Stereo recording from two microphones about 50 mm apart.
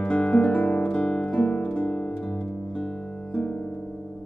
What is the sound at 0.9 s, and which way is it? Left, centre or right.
Music, left.